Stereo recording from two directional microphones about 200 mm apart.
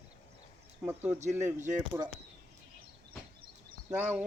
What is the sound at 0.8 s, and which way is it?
Speech, 10° right (ahead or behind).